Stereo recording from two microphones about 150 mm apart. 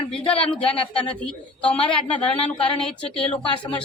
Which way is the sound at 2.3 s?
40° left (ahead or behind).